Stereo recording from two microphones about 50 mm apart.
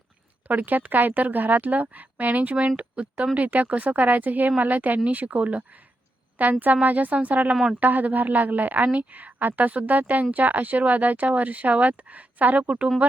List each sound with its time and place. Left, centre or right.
0.4 s a woman's voice: right
7.5 s speech: centre
7.8 s a woman's voice: right